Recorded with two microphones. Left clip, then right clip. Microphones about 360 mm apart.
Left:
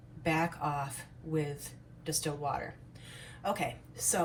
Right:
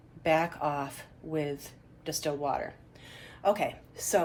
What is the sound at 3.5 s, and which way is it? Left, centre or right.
Speech, right.